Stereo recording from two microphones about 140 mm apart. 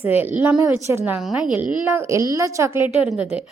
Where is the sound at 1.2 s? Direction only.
5° right (ahead or behind); by 2.8 s 20° right (ahead or behind).